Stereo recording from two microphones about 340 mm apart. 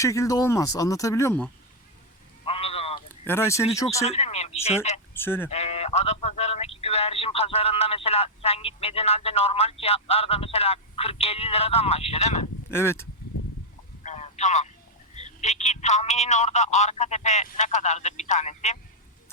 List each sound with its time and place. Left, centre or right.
0.0 s speech: centre
2.4 s a sound: centre
3.2 s speech: centre
5.1 s speech: centre
5.5 s speech: centre
12.7 s speech: centre
14.0 s a sound: centre
15.1 s a man's voice: centre